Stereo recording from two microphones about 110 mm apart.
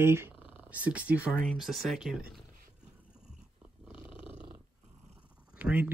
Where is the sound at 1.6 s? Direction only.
Centre (ahead or behind).